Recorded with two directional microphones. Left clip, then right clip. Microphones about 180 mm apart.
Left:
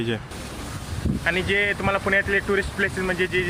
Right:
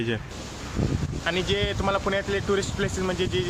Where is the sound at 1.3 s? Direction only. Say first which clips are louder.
Left 4 dB; centre (ahead or behind).